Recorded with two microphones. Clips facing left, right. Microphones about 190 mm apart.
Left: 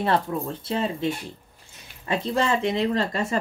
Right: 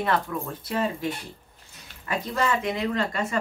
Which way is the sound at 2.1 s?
25° left (ahead or behind).